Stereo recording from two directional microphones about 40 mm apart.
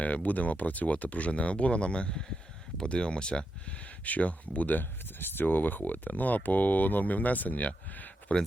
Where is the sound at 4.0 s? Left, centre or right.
Left.